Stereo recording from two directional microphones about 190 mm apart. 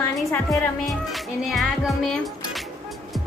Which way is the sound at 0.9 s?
Centre (ahead or behind).